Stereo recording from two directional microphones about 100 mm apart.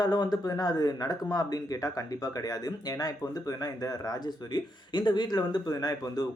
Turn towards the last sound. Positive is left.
turn(degrees=40)  # may be behind; listen again after turning